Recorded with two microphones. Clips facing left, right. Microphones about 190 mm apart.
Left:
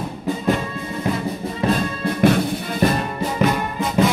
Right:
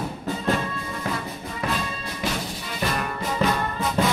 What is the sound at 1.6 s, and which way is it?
Music, 25° left (ahead or behind).